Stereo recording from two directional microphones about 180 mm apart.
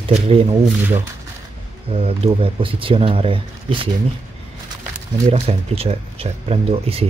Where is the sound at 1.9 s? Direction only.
35° right (ahead or behind).